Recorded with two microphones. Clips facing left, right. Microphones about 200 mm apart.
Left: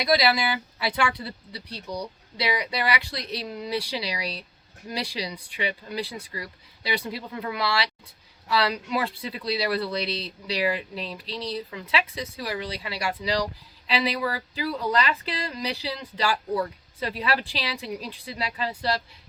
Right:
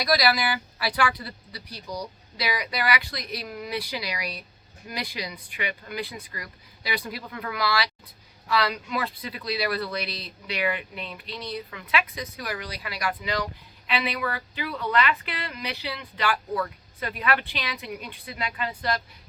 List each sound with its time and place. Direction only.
0.0 s speech: 25° left (ahead or behind)